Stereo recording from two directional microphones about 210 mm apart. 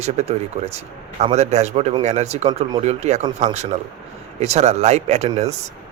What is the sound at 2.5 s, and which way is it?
Speech, 20° right (ahead or behind).